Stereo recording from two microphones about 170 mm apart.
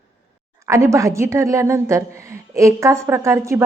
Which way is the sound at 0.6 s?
15° right (ahead or behind).